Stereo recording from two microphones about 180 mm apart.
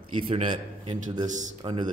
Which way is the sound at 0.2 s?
30° right (ahead or behind).